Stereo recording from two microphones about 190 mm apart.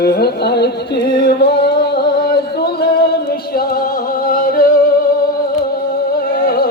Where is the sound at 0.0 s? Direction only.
55° left (ahead or behind).